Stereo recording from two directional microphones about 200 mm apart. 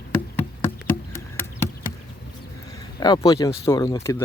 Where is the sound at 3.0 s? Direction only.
20° left (ahead or behind).